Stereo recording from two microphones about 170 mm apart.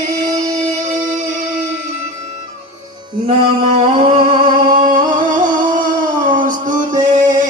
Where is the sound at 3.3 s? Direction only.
35° right (ahead or behind).